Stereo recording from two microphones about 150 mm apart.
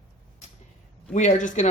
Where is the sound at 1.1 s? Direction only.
55° left (ahead or behind).